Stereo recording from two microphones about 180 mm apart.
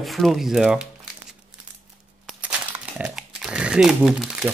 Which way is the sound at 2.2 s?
5° right (ahead or behind).